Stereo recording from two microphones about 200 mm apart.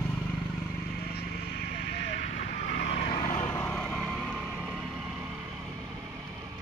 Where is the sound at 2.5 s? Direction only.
50° left (ahead or behind).